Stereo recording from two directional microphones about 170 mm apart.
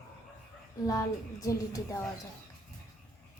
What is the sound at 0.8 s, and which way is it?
Speech, 20° left (ahead or behind).